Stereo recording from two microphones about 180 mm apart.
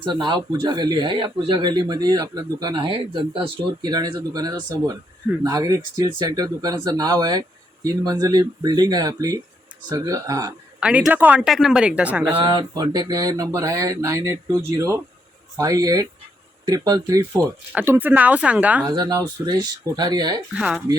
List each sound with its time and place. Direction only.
0.0 s speech: 25° right (ahead or behind)
10.8 s speech: 5° right (ahead or behind)
12.4 s speech: 25° right (ahead or behind); by 18.9 s 5° right (ahead or behind)
18.9 s speech: 20° right (ahead or behind)
20.6 s speech: 5° right (ahead or behind)